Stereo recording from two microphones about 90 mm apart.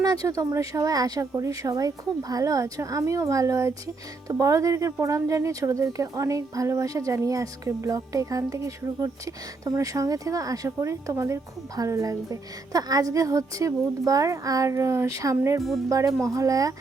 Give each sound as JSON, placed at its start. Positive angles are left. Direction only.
{"t": 0.0, "sound": "speech", "side_deg": -40}